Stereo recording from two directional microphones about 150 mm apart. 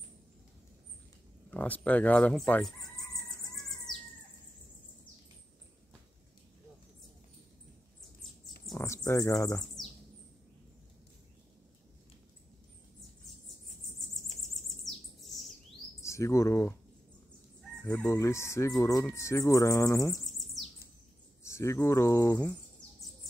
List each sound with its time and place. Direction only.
1.5 s speech: 10° left (ahead or behind)
3.9 s bird: centre (ahead or behind)
8.7 s speech: 20° left (ahead or behind)
14.5 s bird: centre (ahead or behind)
16.0 s speech: 20° left (ahead or behind)
17.8 s speech: 20° left (ahead or behind)
20.2 s bird: centre (ahead or behind)
21.4 s speech: 20° left (ahead or behind)